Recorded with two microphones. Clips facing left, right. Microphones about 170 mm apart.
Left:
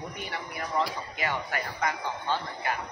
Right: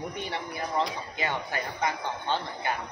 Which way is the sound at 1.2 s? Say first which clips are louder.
Even; 25° right (ahead or behind).